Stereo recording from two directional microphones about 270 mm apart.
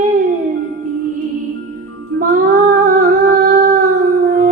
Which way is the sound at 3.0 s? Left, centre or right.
Right.